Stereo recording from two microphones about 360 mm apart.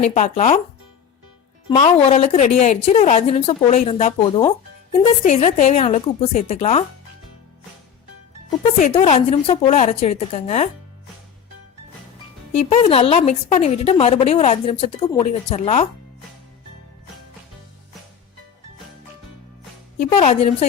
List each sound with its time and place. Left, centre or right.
0.0 s speech: centre
1.7 s a woman's voice: centre
8.4 s a woman's voice: centre
12.5 s a woman's voice: centre
20.0 s a woman's voice: centre